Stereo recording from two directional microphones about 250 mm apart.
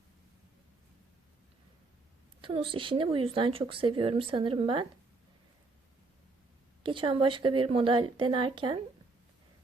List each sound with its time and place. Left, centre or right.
2.4 s a woman's voice: right
6.8 s a woman's voice: centre